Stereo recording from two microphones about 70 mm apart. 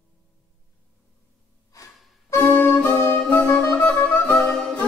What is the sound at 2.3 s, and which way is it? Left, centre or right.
Music, left.